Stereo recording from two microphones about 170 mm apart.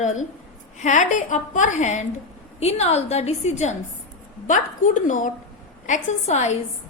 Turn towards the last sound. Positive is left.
turn(degrees=45)  # may be behind; listen again after turning